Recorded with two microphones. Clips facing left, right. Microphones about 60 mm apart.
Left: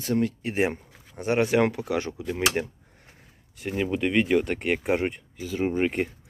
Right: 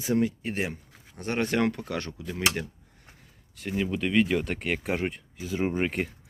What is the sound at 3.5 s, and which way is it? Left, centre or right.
Speech, centre.